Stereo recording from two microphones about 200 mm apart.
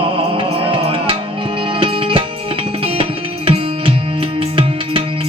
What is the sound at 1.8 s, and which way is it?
Music, 25° right (ahead or behind).